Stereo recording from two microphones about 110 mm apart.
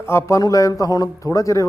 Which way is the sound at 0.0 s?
25° left (ahead or behind).